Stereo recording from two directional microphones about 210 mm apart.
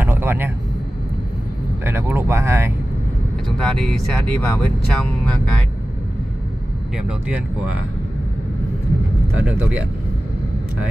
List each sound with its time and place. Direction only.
0.0 s vehicle: 10° right (ahead or behind)
1.9 s speech: 10° right (ahead or behind)
3.4 s speech: centre (ahead or behind)
7.0 s speech: 5° right (ahead or behind)
9.4 s speech: 5° right (ahead or behind)